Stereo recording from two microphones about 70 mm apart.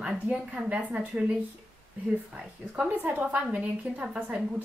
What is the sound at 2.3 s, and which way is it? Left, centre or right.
A woman's voice, centre.